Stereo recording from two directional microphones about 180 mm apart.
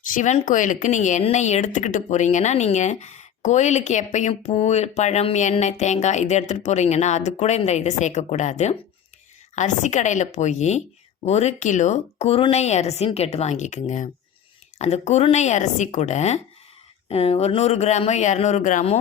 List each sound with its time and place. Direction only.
0.0 s speech: 45° left (ahead or behind)